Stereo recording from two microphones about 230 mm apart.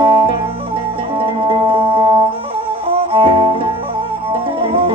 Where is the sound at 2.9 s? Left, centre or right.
Right.